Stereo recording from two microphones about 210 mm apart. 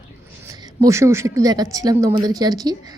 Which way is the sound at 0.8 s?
15° right (ahead or behind).